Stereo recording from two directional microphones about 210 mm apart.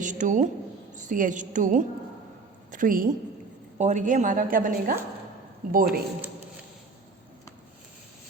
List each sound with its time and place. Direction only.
0.0 s a woman's voice: 35° right (ahead or behind)